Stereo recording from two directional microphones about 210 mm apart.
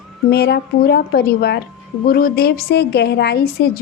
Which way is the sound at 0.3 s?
50° left (ahead or behind).